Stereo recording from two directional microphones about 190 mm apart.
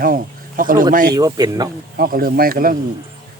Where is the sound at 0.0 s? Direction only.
50° right (ahead or behind).